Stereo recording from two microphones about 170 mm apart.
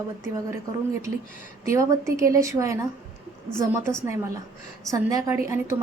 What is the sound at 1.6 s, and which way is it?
A woman's voice, 20° right (ahead or behind).